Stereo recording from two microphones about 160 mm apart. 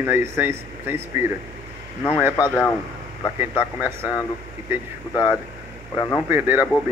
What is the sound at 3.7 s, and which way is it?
Speech, 15° right (ahead or behind).